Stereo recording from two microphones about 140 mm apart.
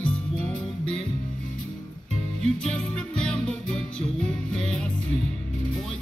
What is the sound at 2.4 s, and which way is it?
Music, 5° left (ahead or behind).